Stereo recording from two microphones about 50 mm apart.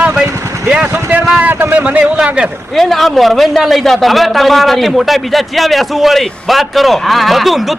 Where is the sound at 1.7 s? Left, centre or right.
Right.